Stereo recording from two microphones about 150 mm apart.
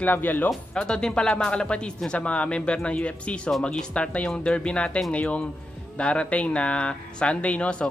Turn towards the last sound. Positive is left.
turn(degrees=5)  # may be behind; listen again after turning